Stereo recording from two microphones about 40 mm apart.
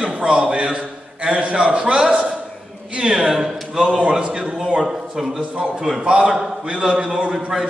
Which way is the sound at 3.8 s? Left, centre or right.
Right.